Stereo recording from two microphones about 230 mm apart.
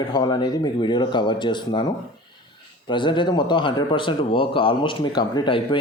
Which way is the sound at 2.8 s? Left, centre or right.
Left.